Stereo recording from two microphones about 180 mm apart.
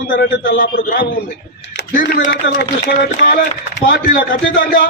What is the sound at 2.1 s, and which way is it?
Speech, 90° left.